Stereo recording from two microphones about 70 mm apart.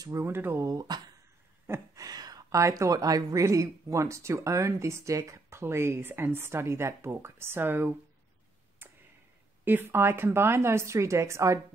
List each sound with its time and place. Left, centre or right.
0.2 s speech: right
0.7 s speech: right
2.0 s a sound: right
2.5 s speech: right
9.7 s speech: right